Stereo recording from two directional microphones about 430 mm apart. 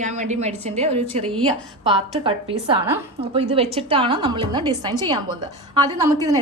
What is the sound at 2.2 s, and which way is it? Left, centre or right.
A woman's voice, centre.